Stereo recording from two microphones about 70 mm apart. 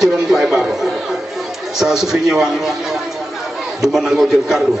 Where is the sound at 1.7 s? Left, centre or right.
Centre.